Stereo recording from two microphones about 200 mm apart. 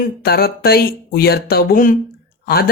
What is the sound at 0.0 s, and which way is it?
Speech, 50° left (ahead or behind).